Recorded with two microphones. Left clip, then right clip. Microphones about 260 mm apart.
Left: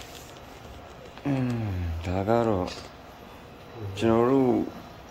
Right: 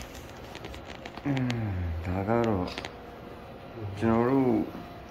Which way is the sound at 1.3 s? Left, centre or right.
Left.